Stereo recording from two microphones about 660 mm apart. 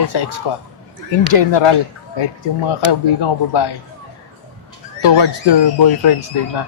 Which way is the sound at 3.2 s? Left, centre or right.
Left.